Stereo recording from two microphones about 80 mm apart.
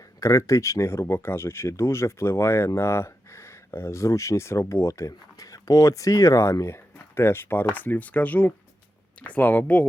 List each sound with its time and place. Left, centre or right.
0.2 s speech: left; by 9.8 s centre